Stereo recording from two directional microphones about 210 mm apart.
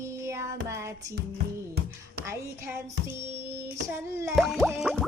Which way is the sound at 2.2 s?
10° right (ahead or behind).